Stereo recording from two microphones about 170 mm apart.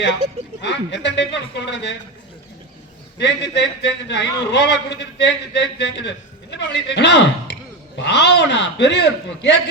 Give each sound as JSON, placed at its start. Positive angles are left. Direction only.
{"t": 0.6, "sound": "a man's voice", "side_deg": 90}
{"t": 3.2, "sound": "a man's voice", "side_deg": 90}